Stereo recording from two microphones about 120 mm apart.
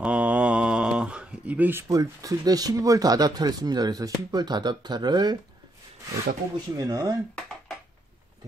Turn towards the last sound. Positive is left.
turn(degrees=-30)  # may be behind; listen again after turning